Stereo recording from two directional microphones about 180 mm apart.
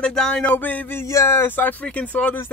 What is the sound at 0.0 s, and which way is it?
Speech, 5° left (ahead or behind).